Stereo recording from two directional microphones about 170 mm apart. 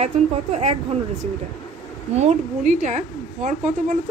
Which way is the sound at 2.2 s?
45° right (ahead or behind).